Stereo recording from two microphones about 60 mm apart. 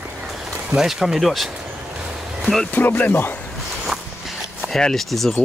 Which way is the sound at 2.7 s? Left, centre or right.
Left.